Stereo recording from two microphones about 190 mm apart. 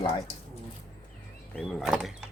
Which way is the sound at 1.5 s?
5° left (ahead or behind).